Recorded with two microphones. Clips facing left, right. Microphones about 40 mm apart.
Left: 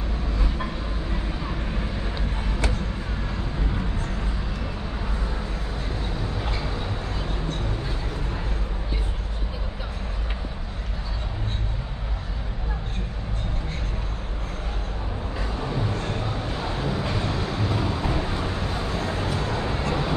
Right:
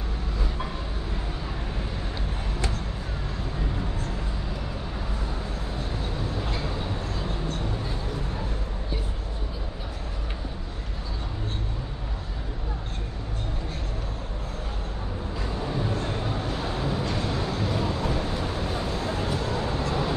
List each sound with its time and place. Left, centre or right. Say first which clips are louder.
16.7 s vehicle: left 2 dB; centre
18.7 s vehicle: even; centre
18.9 s a sound: left 1 dB; left